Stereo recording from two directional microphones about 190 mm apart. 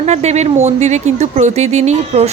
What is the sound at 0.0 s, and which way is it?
Speech, 35° right (ahead or behind).